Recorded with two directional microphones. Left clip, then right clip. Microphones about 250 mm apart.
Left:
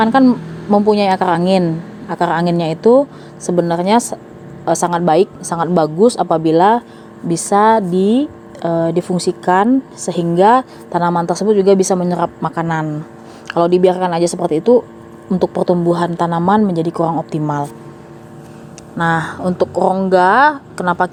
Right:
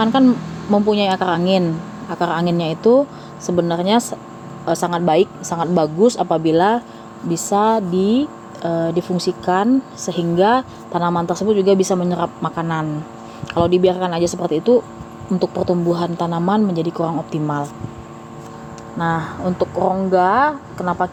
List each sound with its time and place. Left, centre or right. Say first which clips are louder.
0.0 s speech: left 3 dB; centre
18.9 s speech: left 5 dB; left